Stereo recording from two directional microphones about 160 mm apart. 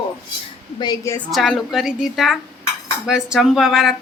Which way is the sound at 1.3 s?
Centre (ahead or behind).